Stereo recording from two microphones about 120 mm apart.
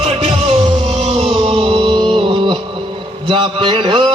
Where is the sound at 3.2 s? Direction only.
45° right (ahead or behind).